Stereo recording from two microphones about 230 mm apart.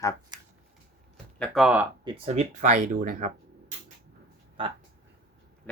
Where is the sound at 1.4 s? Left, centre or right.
Centre.